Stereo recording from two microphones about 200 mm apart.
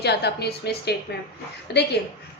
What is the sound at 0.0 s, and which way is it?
A woman's voice, 55° left (ahead or behind).